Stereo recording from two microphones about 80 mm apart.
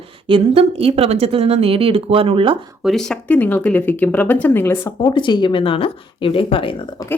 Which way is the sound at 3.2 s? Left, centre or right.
Left.